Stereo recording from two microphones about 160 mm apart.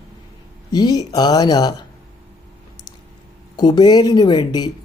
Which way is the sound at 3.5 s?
25° left (ahead or behind).